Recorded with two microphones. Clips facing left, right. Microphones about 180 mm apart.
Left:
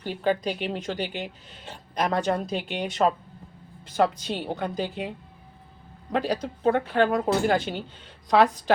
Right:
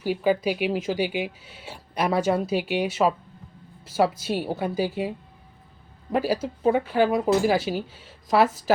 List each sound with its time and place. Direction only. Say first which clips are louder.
0.0 s speech: right 3 dB; 10° right (ahead or behind)